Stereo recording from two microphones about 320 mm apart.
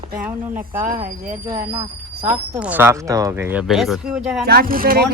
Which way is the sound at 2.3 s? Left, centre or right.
Centre.